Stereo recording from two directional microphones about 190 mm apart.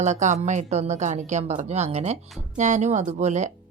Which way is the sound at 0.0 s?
40° right (ahead or behind).